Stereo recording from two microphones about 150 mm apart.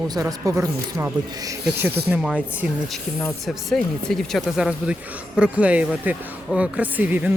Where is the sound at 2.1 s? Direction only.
10° right (ahead or behind).